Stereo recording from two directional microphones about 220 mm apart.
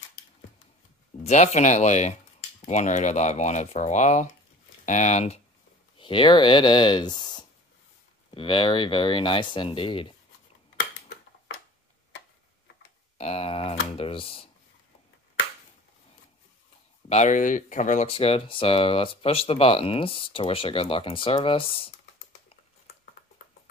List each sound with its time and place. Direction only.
1.2 s speech: 30° left (ahead or behind)
13.2 s speech: 25° left (ahead or behind)
17.1 s speech: 35° left (ahead or behind)